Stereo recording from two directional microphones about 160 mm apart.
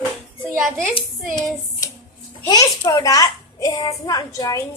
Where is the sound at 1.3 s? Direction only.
25° left (ahead or behind).